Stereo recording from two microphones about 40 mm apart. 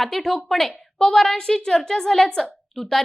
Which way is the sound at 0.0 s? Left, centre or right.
Centre.